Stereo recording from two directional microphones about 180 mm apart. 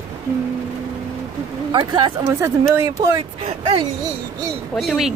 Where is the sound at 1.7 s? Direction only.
25° right (ahead or behind).